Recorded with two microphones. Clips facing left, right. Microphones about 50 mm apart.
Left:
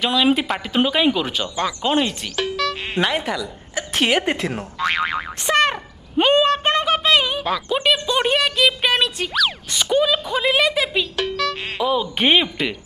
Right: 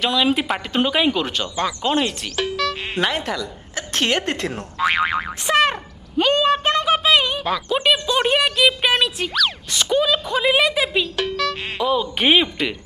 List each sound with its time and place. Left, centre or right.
0.0 s speech: centre
4.8 s boing: centre
6.1 s a sound: left
6.9 s speech: centre